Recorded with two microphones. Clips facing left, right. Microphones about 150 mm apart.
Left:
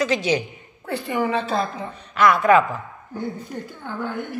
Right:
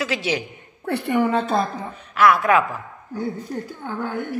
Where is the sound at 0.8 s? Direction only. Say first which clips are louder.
Right 3 dB; 60° right (ahead or behind).